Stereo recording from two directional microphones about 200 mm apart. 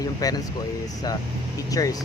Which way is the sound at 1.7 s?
15° left (ahead or behind).